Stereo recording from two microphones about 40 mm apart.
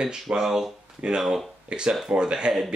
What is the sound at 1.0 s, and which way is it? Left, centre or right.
Speech, centre.